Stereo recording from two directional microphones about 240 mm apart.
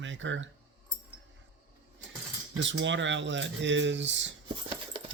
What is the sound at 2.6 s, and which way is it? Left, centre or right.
Speech, right.